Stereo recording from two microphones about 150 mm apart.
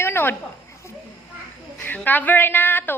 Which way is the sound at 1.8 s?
10° left (ahead or behind).